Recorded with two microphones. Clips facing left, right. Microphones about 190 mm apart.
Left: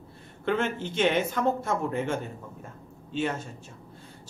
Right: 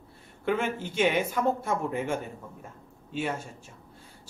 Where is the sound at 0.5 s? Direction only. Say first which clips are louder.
Left 1 dB; 10° right (ahead or behind).